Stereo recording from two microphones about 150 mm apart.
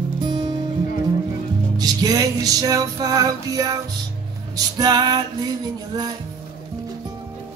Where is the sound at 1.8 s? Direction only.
25° right (ahead or behind).